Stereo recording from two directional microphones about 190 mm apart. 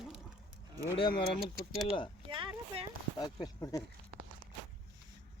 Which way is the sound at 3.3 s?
20° left (ahead or behind).